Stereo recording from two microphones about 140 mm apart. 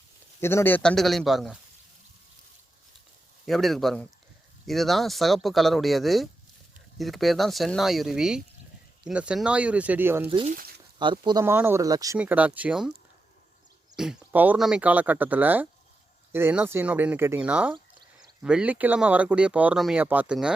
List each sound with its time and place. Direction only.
0.3 s speech: 15° left (ahead or behind); by 1.5 s centre (ahead or behind)
3.4 s speech: centre (ahead or behind); by 10.2 s 15° right (ahead or behind)
10.2 s speech: 40° right (ahead or behind)
10.5 s speech: 90° right
11.0 s speech: 35° right (ahead or behind)
11.4 s speech: 15° right (ahead or behind)
12.1 s speech: 10° right (ahead or behind)
13.9 s speech: 5° right (ahead or behind)